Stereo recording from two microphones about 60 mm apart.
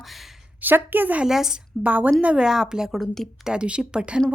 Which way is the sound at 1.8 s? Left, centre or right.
Right.